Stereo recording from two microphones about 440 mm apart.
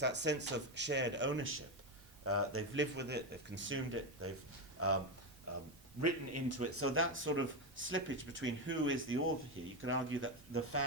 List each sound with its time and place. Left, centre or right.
0.0 s speech: right
6.0 s speech: right